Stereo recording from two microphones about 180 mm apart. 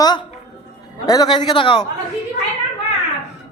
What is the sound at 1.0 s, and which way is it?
Speech, 20° left (ahead or behind).